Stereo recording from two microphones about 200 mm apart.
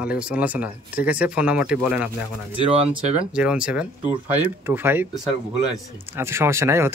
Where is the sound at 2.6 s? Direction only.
30° right (ahead or behind).